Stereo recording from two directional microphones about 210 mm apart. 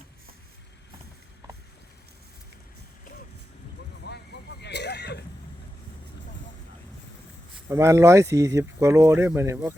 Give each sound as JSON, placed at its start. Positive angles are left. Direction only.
{"t": 4.1, "sound": "music", "side_deg": 50}
{"t": 4.6, "sound": "a sound", "side_deg": 50}
{"t": 7.7, "sound": "speech", "side_deg": -15}